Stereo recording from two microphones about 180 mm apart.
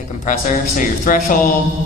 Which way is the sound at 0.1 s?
45° left (ahead or behind).